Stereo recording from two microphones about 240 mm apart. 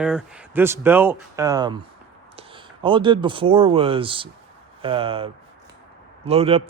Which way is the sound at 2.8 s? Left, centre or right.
Centre.